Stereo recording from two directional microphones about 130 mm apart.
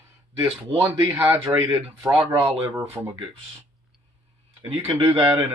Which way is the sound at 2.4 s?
20° right (ahead or behind).